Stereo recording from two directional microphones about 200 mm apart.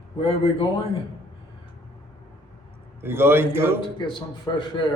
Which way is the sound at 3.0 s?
10° right (ahead or behind).